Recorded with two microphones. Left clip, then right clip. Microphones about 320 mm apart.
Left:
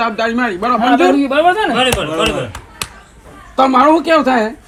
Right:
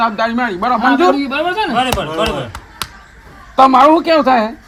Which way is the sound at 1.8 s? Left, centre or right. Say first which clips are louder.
Left 1 dB; right.